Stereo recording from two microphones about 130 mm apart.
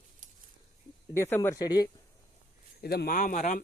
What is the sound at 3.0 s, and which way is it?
Speech, 90° left.